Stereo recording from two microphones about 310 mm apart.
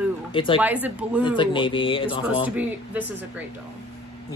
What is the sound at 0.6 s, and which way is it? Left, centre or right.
Speech, centre.